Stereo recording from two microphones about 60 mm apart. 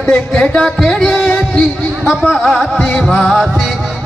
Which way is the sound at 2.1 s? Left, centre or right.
Centre.